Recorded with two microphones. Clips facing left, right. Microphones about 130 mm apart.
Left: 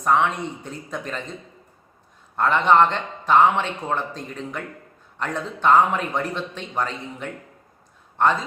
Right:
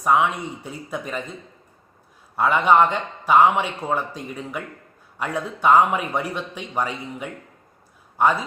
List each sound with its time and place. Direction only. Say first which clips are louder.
0.0 s a man's voice: right 1 dB; 10° right (ahead or behind)
2.3 s a man's voice: even; 10° right (ahead or behind)